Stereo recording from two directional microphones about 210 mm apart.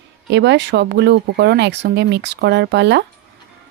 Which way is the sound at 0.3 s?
55° right (ahead or behind).